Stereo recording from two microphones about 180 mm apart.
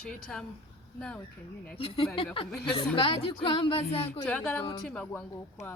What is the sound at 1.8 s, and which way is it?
Speech, 30° left (ahead or behind).